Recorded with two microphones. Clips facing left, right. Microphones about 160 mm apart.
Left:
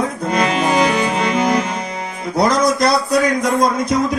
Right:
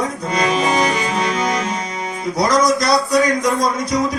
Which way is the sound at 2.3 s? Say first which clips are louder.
Left 1 dB; 55° left (ahead or behind).